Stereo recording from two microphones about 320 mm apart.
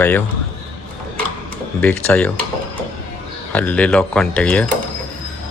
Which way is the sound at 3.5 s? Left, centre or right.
Centre.